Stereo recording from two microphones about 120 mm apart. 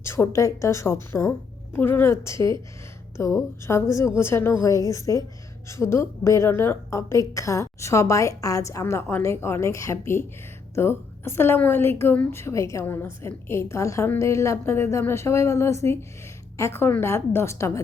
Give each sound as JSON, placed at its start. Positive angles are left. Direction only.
{"t": 0.0, "sound": "a woman's voice", "side_deg": 20}